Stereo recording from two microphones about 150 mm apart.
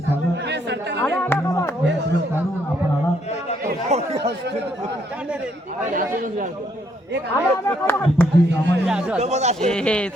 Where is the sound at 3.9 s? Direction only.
45° right (ahead or behind).